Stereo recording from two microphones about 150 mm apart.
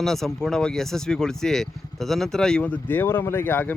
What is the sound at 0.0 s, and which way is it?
Speech, centre (ahead or behind).